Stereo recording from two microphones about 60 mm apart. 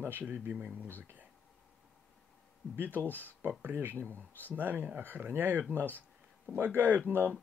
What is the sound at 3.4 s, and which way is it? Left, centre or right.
Speech, right.